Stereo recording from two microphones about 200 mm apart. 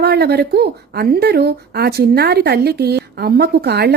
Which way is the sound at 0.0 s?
55° right (ahead or behind).